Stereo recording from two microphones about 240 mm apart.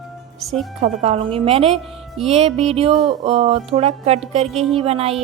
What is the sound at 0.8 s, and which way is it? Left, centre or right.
Speech, right.